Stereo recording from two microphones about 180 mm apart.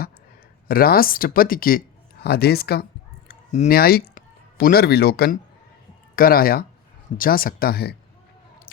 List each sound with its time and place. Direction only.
0.7 s speech: 55° left (ahead or behind)
3.2 s a sound: 45° left (ahead or behind)
3.8 s speech: 55° left (ahead or behind)